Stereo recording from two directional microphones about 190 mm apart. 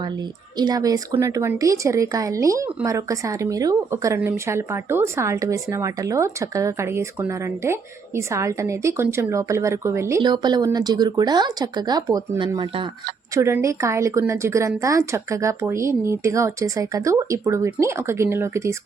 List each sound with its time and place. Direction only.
0.5 s a woman's voice: 20° right (ahead or behind)